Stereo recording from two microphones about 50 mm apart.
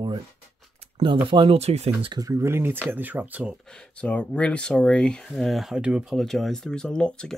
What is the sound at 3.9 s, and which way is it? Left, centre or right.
Speech, left.